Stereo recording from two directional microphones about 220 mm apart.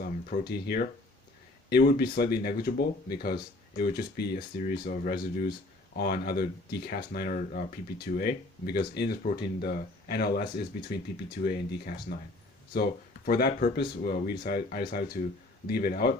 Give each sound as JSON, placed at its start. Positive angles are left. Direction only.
{"t": 0.0, "sound": "speech", "side_deg": 45}